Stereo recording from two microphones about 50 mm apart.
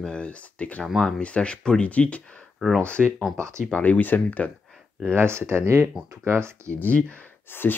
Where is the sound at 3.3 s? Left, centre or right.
Right.